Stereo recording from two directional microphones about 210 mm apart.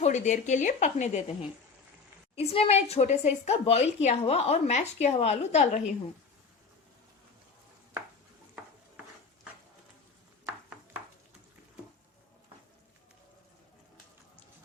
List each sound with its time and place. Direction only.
0.0 s a woman's voice: 35° left (ahead or behind)